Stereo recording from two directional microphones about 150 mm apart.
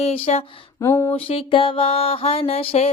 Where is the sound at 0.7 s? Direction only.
20° left (ahead or behind).